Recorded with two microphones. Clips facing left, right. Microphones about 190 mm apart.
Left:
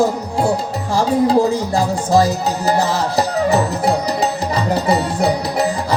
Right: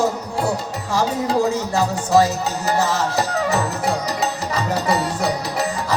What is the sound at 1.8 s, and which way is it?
Music, 30° left (ahead or behind).